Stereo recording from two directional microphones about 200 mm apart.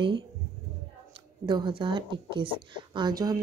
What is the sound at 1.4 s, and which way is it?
A woman's voice, 25° right (ahead or behind).